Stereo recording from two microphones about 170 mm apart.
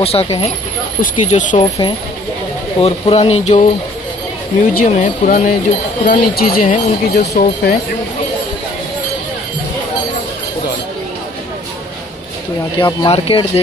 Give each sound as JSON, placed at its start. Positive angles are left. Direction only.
{"t": 0.0, "sound": "speech", "side_deg": 35}
{"t": 1.0, "sound": "speech", "side_deg": 50}
{"t": 2.8, "sound": "speech", "side_deg": 35}
{"t": 6.0, "sound": "speech", "side_deg": 60}
{"t": 12.7, "sound": "speech", "side_deg": 25}